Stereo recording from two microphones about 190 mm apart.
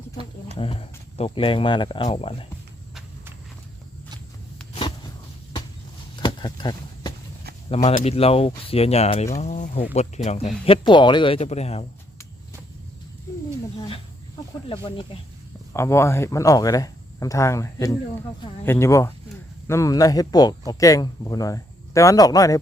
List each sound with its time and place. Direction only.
0.5 s speech: 30° left (ahead or behind)
6.1 s a sound: 25° left (ahead or behind)
7.9 s speech: 35° left (ahead or behind)
10.7 s speech: 25° left (ahead or behind)
13.7 s speech: 30° left (ahead or behind)
15.7 s speech: 15° left (ahead or behind)